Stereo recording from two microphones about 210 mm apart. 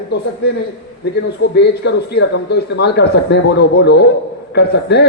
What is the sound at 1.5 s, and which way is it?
A man's voice, 55° left (ahead or behind).